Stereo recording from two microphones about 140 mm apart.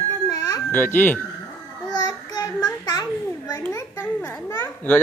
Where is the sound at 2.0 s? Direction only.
30° left (ahead or behind).